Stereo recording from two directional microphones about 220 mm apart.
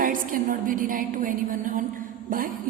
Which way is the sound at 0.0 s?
40° right (ahead or behind).